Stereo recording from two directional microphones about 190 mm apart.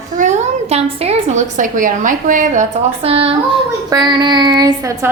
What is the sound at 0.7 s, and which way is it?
A woman's voice, 35° right (ahead or behind).